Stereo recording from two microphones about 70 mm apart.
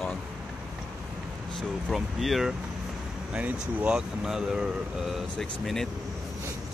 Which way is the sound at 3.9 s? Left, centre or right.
Centre.